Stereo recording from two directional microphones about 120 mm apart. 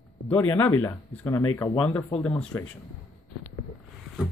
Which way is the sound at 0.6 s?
15° left (ahead or behind).